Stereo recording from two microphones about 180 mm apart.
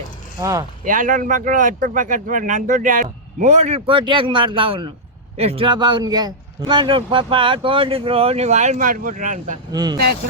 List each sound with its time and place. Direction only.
0.9 s speech: 45° right (ahead or behind)
9.7 s speech: 25° right (ahead or behind)